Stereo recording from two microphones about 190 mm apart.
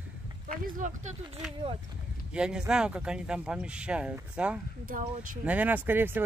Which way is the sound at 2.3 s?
5° right (ahead or behind).